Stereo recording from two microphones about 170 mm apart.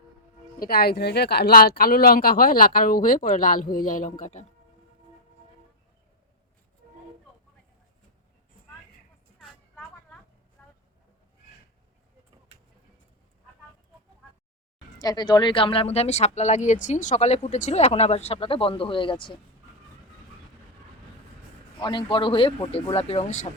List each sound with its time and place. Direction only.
0.6 s speech: 65° left (ahead or behind); by 4.4 s 45° left (ahead or behind)
14.9 s speech: 25° left (ahead or behind)
21.8 s speech: 25° left (ahead or behind)